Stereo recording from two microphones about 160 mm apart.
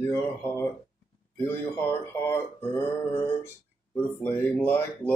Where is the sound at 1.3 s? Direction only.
15° left (ahead or behind).